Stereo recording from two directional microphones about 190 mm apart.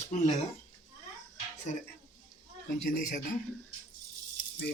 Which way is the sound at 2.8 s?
50° left (ahead or behind).